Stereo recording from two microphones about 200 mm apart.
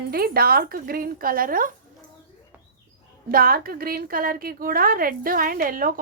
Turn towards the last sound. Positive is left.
turn(degrees=-45)  # may be behind; listen again after turning